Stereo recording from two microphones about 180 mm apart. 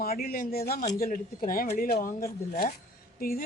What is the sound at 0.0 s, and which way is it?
A woman's voice, 55° left (ahead or behind).